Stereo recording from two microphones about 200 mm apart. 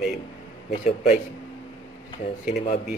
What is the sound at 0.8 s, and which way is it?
Speech, 35° left (ahead or behind).